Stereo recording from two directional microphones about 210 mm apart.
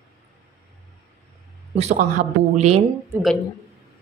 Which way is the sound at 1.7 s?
30° right (ahead or behind).